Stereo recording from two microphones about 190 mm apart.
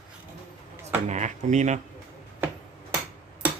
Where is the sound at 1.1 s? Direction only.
40° right (ahead or behind).